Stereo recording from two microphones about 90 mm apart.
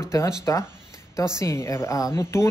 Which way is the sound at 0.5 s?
40° left (ahead or behind).